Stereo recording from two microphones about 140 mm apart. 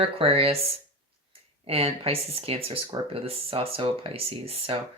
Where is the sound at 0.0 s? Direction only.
45° right (ahead or behind).